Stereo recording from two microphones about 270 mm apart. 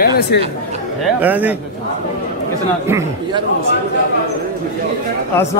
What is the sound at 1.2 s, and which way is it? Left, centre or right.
Speech, centre.